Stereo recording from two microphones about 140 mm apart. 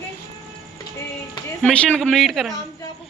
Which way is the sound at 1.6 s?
5° left (ahead or behind).